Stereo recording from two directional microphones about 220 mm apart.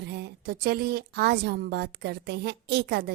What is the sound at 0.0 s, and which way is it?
A woman's voice, 50° right (ahead or behind).